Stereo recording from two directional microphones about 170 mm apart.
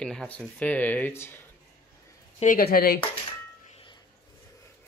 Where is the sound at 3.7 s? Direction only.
35° left (ahead or behind).